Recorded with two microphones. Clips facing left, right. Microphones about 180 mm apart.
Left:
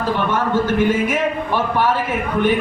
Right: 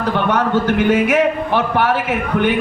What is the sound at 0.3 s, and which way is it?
A man's voice, 70° right (ahead or behind).